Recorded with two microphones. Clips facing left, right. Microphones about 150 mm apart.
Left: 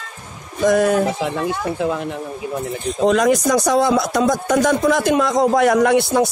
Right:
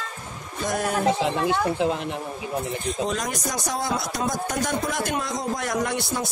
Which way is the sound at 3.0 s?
90° left.